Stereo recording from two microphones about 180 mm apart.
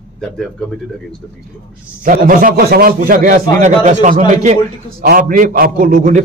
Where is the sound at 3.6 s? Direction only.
40° right (ahead or behind).